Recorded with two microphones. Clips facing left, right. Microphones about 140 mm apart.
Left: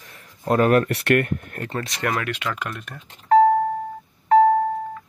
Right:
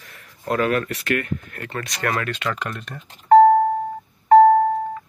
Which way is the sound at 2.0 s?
15° left (ahead or behind).